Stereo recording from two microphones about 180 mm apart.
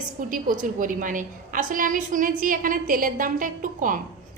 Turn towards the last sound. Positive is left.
turn(degrees=-50)  # may be behind; listen again after turning